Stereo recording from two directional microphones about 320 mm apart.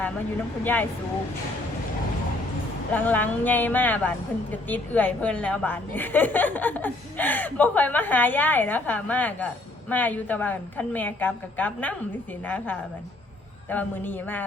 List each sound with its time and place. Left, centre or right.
0.6 s a woman's voice: centre
2.9 s a woman's voice: centre